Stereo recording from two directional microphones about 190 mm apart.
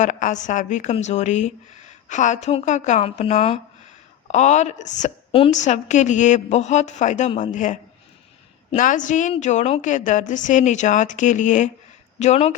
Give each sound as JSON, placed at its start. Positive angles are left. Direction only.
{"t": 0.0, "sound": "speech", "side_deg": 40}